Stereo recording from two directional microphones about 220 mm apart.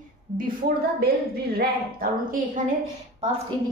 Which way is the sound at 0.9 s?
45° right (ahead or behind).